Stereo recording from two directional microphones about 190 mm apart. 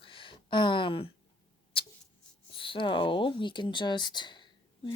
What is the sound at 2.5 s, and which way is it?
Speech, 25° left (ahead or behind).